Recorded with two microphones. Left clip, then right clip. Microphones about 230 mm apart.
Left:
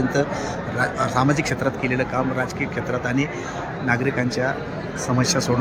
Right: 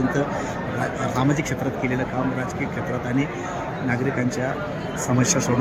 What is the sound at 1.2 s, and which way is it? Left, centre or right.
Speech, centre.